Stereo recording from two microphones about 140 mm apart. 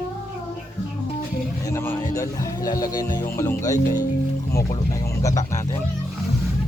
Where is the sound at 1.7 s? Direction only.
20° left (ahead or behind).